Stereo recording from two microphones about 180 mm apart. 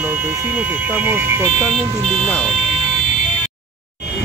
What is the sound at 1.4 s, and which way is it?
Speech, 5° left (ahead or behind).